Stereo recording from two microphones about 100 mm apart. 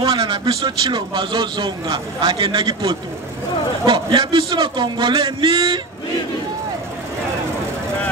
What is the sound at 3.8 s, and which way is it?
A man's voice, 60° right (ahead or behind).